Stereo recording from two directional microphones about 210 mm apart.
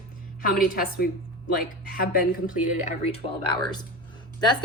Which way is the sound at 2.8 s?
30° left (ahead or behind).